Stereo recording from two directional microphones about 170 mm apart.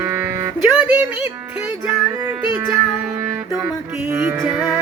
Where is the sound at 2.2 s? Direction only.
15° right (ahead or behind).